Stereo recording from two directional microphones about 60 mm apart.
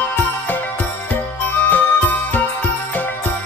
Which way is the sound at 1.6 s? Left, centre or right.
Left.